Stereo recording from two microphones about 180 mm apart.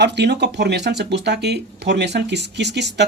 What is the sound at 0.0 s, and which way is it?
Speech, 70° right (ahead or behind).